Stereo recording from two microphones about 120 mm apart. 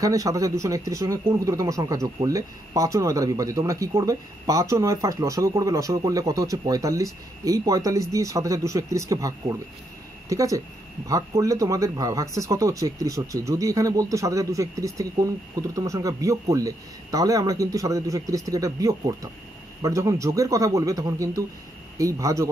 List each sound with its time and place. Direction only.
0.0 s speech: 30° right (ahead or behind)